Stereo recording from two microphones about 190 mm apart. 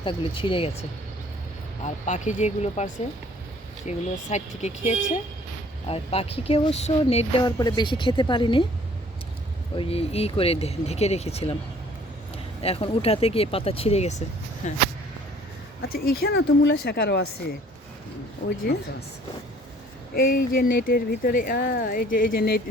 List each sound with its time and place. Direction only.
0.0 s speech: 25° left (ahead or behind)
9.7 s speech: 30° left (ahead or behind)
12.6 s speech: 30° left (ahead or behind)
15.9 s speech: 55° left (ahead or behind)
18.4 s speech: 55° left (ahead or behind)
20.1 s speech: 50° left (ahead or behind)